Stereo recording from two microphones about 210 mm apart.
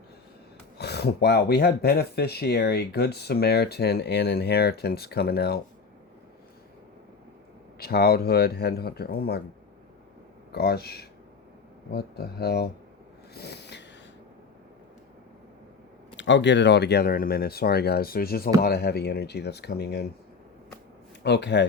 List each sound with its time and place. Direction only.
0.8 s speech: 50° left (ahead or behind)
7.8 s speech: 45° left (ahead or behind)
10.5 s speech: 50° left (ahead or behind)
13.3 s snort: 50° left (ahead or behind)
16.1 s speech: 60° left (ahead or behind)
21.2 s speech: 55° left (ahead or behind)